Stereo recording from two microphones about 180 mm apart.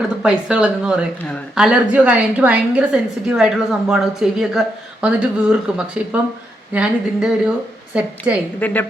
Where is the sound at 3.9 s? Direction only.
5° right (ahead or behind).